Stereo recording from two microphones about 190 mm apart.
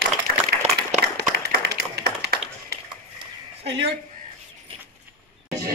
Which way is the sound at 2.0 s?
60° right (ahead or behind).